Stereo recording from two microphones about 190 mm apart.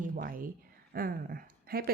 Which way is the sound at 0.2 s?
45° right (ahead or behind).